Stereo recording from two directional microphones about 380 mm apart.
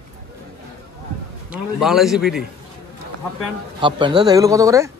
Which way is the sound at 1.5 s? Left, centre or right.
Centre.